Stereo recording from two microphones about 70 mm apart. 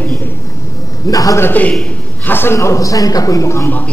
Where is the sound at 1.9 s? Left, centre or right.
Left.